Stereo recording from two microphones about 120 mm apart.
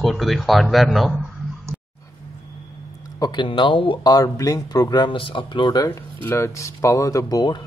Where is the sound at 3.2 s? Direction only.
40° left (ahead or behind).